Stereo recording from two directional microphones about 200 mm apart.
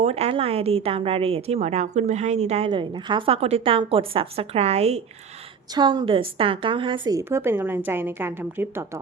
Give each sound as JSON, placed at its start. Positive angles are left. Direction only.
{"t": 0.0, "sound": "a woman's voice", "side_deg": -30}
{"t": 5.7, "sound": "speech", "side_deg": -20}